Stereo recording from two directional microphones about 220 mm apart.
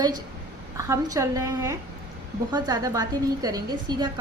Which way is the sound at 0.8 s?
15° right (ahead or behind).